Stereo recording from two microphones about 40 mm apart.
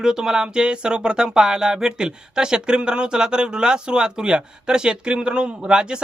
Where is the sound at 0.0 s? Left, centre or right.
Centre.